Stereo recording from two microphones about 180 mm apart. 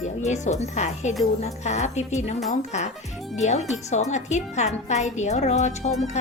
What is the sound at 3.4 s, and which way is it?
A woman's voice, 40° left (ahead or behind).